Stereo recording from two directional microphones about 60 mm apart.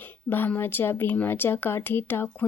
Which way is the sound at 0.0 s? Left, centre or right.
Left.